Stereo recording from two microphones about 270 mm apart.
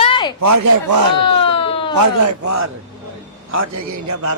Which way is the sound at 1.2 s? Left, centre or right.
Centre.